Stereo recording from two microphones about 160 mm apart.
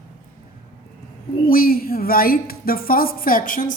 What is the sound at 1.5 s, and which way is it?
A woman's voice, 65° left (ahead or behind).